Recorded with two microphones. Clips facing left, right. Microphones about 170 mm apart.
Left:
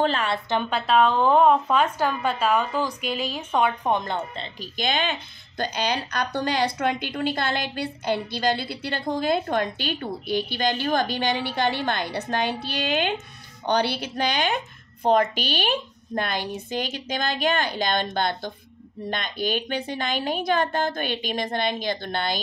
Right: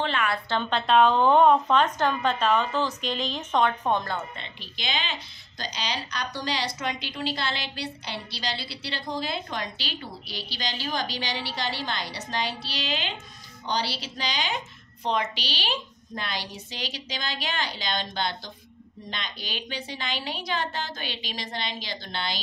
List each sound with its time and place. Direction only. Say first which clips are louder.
0.0 s a sound: left 4 dB; 35° left (ahead or behind)
0.5 s a woman's voice: left 1 dB; 10° left (ahead or behind)
4.4 s a woman's voice: left 8 dB; 45° left (ahead or behind)